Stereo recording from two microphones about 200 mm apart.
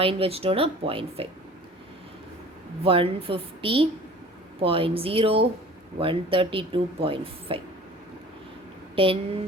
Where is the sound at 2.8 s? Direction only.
25° right (ahead or behind).